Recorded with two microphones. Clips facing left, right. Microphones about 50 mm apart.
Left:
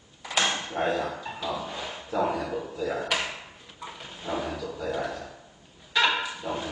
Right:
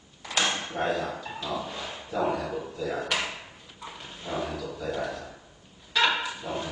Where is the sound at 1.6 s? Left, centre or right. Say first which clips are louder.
Left 1 dB; centre.